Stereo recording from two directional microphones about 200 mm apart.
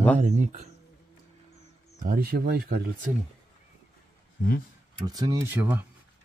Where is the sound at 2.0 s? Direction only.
50° right (ahead or behind).